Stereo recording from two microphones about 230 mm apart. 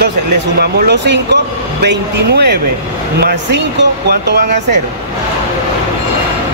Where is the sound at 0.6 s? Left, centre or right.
Right.